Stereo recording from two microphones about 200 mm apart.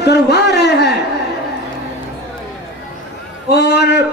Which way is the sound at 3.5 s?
55° left (ahead or behind).